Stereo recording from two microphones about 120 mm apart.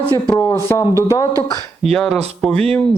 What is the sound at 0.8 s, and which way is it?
Speech, 25° right (ahead or behind).